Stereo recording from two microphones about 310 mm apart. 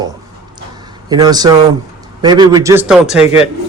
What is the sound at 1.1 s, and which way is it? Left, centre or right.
Speech, centre.